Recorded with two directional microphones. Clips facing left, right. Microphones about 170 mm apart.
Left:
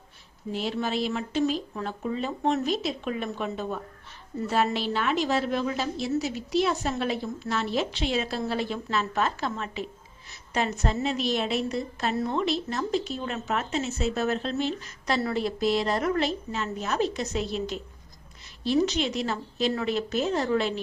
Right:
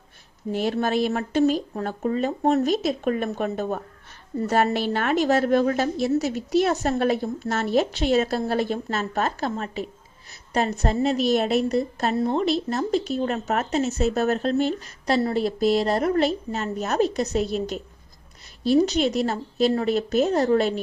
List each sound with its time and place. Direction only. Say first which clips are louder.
0.5 s a woman's voice: right 6 dB; 55° right (ahead or behind)
18.7 s a woman's voice: right 5 dB; 40° right (ahead or behind)